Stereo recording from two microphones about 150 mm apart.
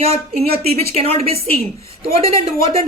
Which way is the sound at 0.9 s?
40° right (ahead or behind).